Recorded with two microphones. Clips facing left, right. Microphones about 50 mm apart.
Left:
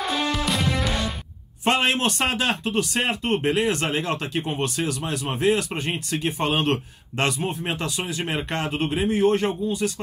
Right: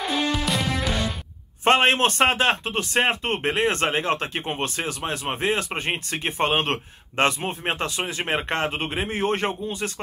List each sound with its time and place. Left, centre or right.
0.0 s music: centre
1.6 s speech: right